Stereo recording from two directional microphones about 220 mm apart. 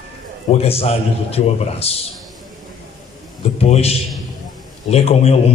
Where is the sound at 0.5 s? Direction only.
25° left (ahead or behind).